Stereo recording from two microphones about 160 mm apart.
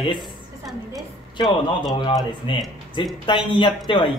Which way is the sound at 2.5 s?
30° left (ahead or behind).